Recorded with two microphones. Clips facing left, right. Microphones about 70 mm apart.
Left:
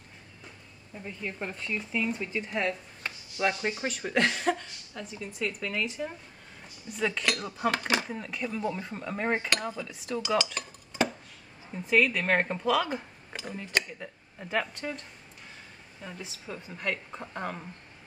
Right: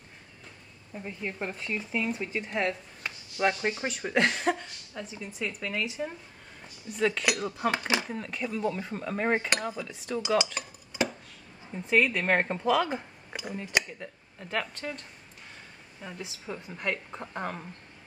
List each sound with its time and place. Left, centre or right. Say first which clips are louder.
0.9 s speech: right 1 dB; centre
7.2 s speech: right 1 dB; centre
8.1 s speech: right 1 dB; centre
9.5 s speech: right 1 dB; centre
9.8 s speech: right 1 dB; centre
10.2 s cutlery: right 2 dB; centre
11.7 s speech: even; centre
13.9 s speech: even; centre